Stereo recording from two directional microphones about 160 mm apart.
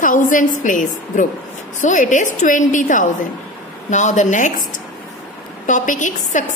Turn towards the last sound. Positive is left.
turn(degrees=50)  # may be behind; listen again after turning